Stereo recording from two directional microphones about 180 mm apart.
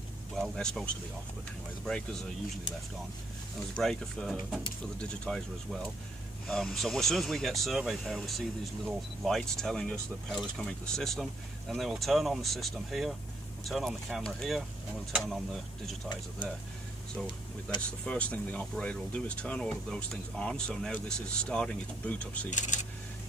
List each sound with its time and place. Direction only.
0.4 s speech: 5° left (ahead or behind)
1.9 s speech: 5° left (ahead or behind)
3.7 s speech: 5° left (ahead or behind)
17.7 s speech: 5° left (ahead or behind)
22.5 s speech: 45° left (ahead or behind)